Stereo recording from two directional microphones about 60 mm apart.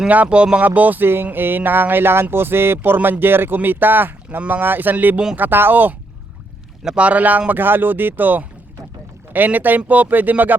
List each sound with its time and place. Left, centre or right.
0.1 s speech: right
6.8 s speech: right